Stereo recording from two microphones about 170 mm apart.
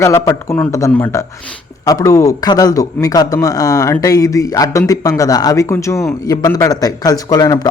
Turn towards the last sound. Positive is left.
turn(degrees=20)  # may be behind; listen again after turning